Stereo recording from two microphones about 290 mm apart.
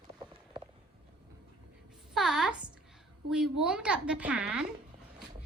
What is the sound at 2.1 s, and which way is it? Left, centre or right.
A woman's voice, centre.